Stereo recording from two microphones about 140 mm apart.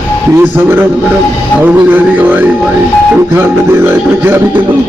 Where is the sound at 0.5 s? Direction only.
15° right (ahead or behind).